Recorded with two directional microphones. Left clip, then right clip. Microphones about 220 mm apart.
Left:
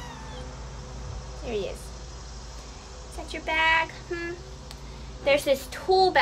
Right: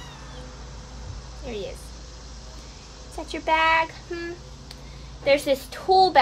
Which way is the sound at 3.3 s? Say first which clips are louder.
Right 3 dB; 10° right (ahead or behind).